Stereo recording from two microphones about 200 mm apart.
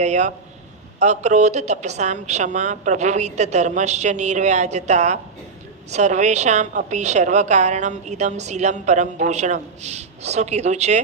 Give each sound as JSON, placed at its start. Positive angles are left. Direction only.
{"t": 0.0, "sound": "a woman's voice", "side_deg": -35}